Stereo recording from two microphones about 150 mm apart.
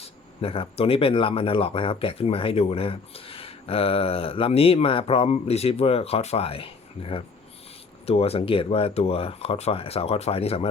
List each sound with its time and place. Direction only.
0.0 s speech: 40° left (ahead or behind)